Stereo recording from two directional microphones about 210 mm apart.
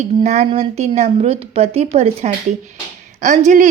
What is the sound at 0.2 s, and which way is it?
A woman's voice, 35° right (ahead or behind).